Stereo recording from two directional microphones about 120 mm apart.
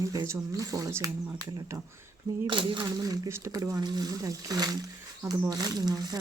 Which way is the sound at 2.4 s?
45° right (ahead or behind).